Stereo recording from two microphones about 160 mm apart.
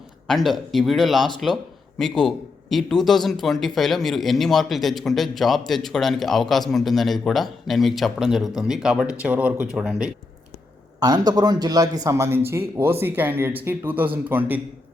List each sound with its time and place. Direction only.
0.3 s speech: centre (ahead or behind)
11.0 s speech: 25° right (ahead or behind)